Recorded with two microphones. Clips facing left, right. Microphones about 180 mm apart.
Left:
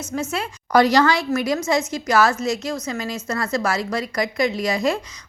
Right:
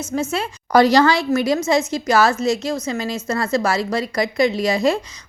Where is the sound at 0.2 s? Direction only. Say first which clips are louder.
Right 3 dB; 30° right (ahead or behind).